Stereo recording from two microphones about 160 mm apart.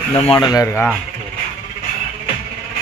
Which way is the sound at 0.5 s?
20° left (ahead or behind).